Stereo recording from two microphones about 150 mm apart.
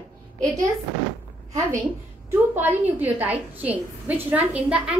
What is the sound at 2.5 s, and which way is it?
A woman's voice, 10° right (ahead or behind).